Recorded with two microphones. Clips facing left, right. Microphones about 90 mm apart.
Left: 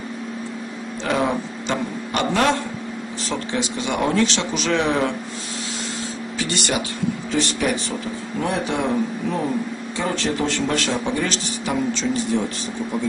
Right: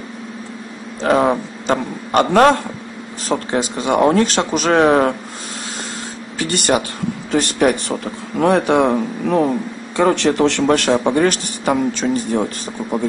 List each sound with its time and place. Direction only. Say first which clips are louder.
1.0 s speech: right 7 dB; 45° right (ahead or behind)
6.3 s a sound: right 7 dB; 50° right (ahead or behind)
7.2 s a man's voice: right 8 dB; 50° right (ahead or behind)